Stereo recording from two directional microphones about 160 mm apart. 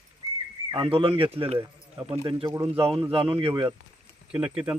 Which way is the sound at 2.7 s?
35° right (ahead or behind).